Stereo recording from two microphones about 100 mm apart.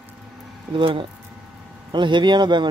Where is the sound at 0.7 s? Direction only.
60° right (ahead or behind).